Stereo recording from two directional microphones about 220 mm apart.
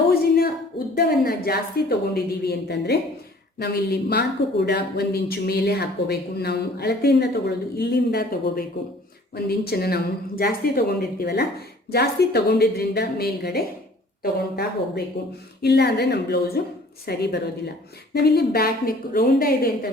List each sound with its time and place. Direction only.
0.1 s a sound: 45° left (ahead or behind)
0.9 s speech: 45° left (ahead or behind)
4.1 s speech: 45° left (ahead or behind)